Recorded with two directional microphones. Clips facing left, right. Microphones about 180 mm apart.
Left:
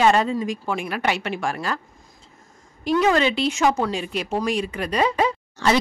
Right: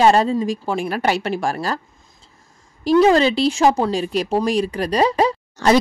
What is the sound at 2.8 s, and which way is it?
A woman's voice, 35° right (ahead or behind).